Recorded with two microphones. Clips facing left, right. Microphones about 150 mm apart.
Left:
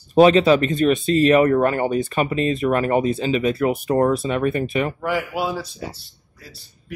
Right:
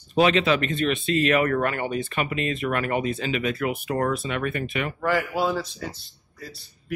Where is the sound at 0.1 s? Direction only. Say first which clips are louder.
Left 7 dB; 40° left (ahead or behind).